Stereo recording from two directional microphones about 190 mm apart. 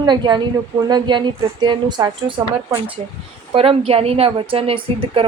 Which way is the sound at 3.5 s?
30° right (ahead or behind).